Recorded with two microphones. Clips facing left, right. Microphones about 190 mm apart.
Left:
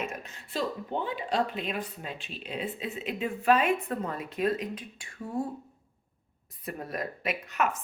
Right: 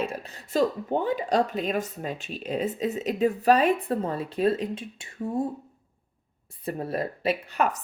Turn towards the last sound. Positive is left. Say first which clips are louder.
# right 4 dB
turn(degrees=-35)  # may be behind; listen again after turning